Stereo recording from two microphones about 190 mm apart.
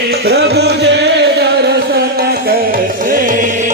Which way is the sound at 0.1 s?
60° right (ahead or behind).